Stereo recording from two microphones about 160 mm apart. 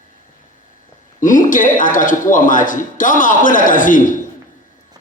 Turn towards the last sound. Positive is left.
turn(degrees=55)  # may be behind; listen again after turning